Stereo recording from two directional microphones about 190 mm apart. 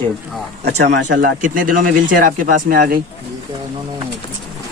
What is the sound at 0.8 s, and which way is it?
Speech, 65° right (ahead or behind).